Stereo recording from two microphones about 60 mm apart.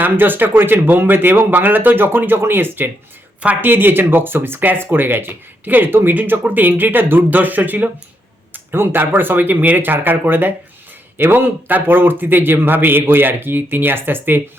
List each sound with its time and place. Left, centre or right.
0.0 s speech: right